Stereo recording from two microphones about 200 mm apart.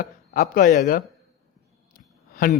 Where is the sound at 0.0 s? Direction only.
40° left (ahead or behind).